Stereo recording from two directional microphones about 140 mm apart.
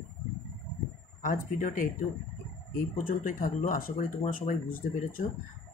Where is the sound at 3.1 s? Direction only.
70° left (ahead or behind).